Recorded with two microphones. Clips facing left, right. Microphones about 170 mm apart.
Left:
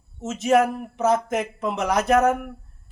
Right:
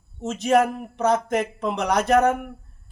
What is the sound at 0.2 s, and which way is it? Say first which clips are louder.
A man's voice: even; centre (ahead or behind).